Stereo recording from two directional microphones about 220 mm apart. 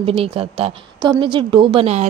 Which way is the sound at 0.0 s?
25° right (ahead or behind).